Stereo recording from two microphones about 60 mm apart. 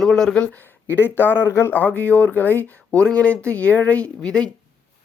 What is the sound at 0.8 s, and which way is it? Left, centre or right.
Speech, left.